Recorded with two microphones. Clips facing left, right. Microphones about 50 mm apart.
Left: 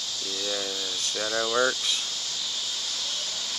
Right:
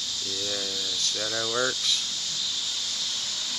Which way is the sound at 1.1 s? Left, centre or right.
Centre.